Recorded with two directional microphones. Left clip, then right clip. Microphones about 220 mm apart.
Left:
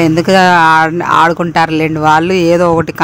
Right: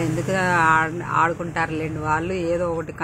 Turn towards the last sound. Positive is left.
turn(degrees=45)  # may be behind; listen again after turning